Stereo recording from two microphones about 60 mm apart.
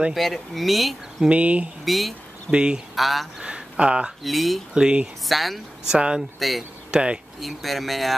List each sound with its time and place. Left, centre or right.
0.1 s speech: centre
1.3 s speech: right
1.9 s speech: centre
2.5 s speech: centre
3.0 s speech: centre
3.4 s a sound: centre
4.2 s speech: centre
4.7 s speech: centre
5.2 s speech: centre
5.9 s speech: centre
7.3 s speech: centre